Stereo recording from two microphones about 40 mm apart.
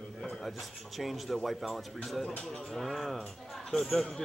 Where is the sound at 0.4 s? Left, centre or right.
Centre.